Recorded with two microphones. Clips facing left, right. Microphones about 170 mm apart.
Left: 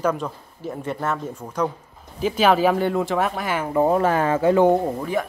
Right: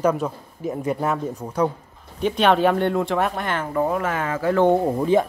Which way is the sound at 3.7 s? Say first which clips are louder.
Left 6 dB; 30° left (ahead or behind).